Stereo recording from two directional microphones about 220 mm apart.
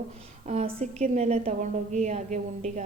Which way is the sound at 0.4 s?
30° right (ahead or behind).